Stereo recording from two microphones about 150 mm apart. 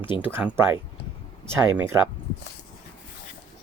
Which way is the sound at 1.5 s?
15° right (ahead or behind).